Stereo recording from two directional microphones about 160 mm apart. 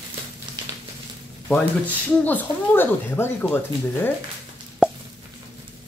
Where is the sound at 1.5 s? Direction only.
10° left (ahead or behind).